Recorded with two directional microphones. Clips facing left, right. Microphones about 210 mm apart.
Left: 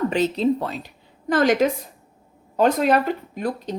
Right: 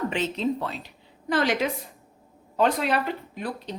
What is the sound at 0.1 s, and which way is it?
A woman's voice, 40° left (ahead or behind).